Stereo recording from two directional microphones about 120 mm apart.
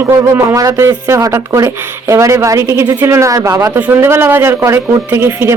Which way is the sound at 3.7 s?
15° right (ahead or behind).